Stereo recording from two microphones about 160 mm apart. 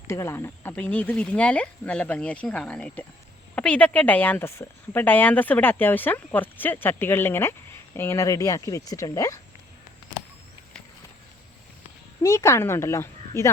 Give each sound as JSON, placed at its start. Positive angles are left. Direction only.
{"t": 0.1, "sound": "speech", "side_deg": 15}
{"t": 12.2, "sound": "speech", "side_deg": 15}